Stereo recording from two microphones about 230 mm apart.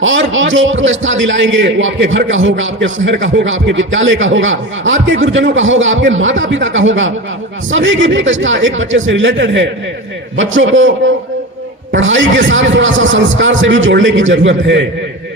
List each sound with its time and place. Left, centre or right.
0.0 s a man's voice: right